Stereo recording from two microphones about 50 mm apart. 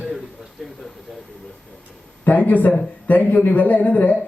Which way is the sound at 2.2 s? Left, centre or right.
Left.